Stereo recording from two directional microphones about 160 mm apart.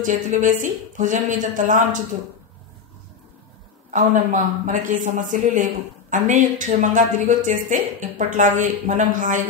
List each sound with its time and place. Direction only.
0.0 s speech: 55° right (ahead or behind)
3.9 s speech: 50° right (ahead or behind)